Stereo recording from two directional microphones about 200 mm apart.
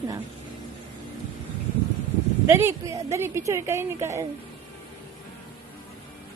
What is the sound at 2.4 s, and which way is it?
A woman's voice, 15° right (ahead or behind).